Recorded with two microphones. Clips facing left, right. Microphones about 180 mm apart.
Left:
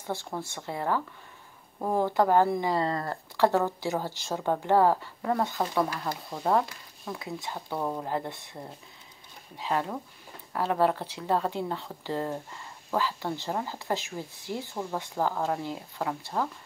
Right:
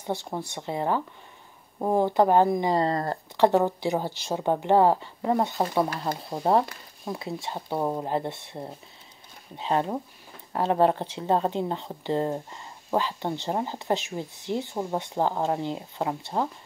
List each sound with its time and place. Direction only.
0.0 s speech: 20° right (ahead or behind)
2.8 s speech: 40° right (ahead or behind)
3.3 s speech: 20° right (ahead or behind)